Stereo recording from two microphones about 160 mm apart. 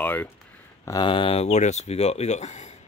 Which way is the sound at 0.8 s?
25° left (ahead or behind).